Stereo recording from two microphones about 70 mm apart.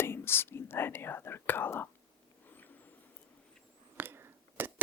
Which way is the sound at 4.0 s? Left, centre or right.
Right.